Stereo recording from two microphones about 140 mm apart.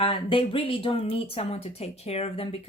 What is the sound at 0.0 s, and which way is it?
Speech, 40° left (ahead or behind).